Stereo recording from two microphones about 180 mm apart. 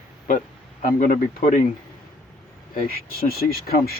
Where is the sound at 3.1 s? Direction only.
55° left (ahead or behind).